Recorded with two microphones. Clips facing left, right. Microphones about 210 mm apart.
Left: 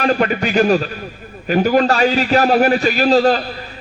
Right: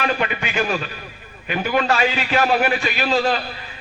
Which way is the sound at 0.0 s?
40° left (ahead or behind).